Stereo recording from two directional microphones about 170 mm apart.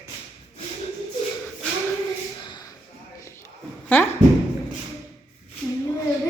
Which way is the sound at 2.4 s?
25° left (ahead or behind).